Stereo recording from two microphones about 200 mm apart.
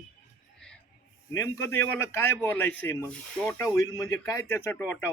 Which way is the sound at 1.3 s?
15° left (ahead or behind).